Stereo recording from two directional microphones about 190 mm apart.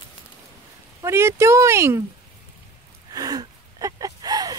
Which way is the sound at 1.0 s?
15° right (ahead or behind).